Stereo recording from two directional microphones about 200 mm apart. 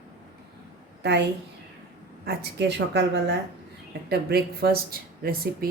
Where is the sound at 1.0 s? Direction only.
60° right (ahead or behind).